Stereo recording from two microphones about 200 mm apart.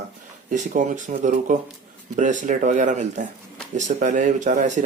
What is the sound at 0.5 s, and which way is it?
Speech, 40° right (ahead or behind).